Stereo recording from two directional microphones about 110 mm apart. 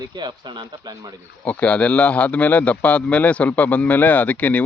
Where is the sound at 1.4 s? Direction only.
10° left (ahead or behind).